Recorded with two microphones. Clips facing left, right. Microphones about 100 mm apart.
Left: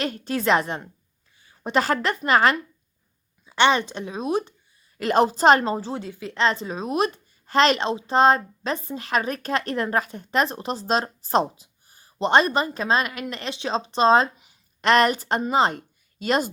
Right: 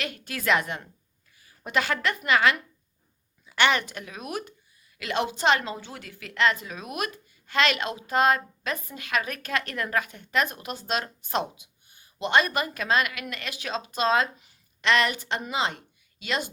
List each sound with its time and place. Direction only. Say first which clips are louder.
0.0 s a woman's voice: left 6 dB; 35° left (ahead or behind)
3.4 s speech: left 4 dB; 25° left (ahead or behind)
4.9 s a woman's voice: left 8 dB; 40° left (ahead or behind)
14.8 s a woman's voice: left 5 dB; 40° left (ahead or behind)